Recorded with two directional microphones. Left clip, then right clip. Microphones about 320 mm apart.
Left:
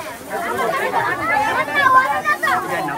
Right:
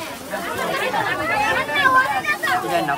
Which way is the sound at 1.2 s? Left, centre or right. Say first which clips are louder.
Left 2 dB; centre.